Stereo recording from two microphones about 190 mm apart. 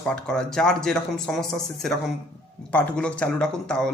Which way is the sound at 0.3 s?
5° left (ahead or behind).